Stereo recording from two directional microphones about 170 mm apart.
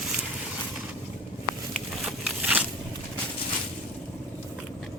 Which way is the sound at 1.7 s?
Centre (ahead or behind).